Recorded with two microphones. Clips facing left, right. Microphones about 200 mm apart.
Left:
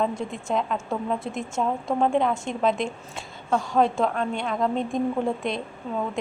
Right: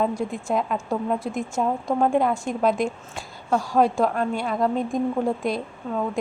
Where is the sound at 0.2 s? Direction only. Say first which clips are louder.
Right 2 dB; 5° right (ahead or behind).